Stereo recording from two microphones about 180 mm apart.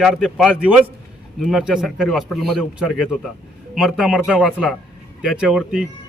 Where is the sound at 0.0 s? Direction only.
Centre (ahead or behind).